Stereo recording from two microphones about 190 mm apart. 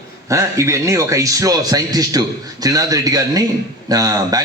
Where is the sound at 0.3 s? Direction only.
15° right (ahead or behind).